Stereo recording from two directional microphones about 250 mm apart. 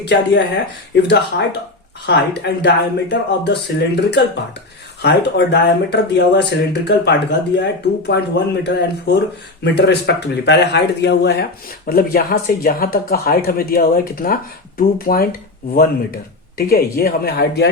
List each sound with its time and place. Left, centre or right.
0.1 s speech: left
2.0 s speech: left